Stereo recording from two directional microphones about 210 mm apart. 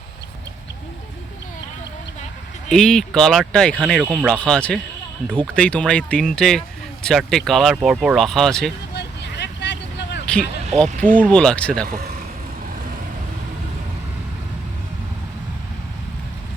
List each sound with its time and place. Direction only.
2.6 s speech: centre (ahead or behind)
9.0 s vehicle: 55° left (ahead or behind)
10.8 s speech: 40° right (ahead or behind)
11.2 s speech: 5° left (ahead or behind)